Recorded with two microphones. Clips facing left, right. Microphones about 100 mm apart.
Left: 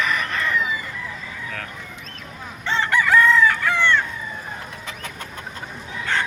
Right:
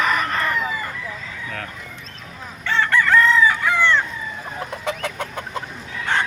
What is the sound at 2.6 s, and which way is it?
Chicken, 20° left (ahead or behind).